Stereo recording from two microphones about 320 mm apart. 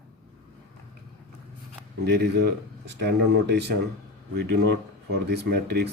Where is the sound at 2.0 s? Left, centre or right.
Right.